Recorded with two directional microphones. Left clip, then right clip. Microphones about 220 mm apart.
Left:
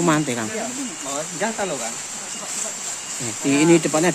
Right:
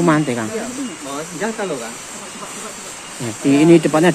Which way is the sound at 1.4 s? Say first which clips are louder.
Right 2 dB; 50° left (ahead or behind).